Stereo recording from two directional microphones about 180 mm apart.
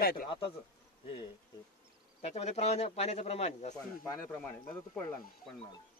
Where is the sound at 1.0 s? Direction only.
30° left (ahead or behind).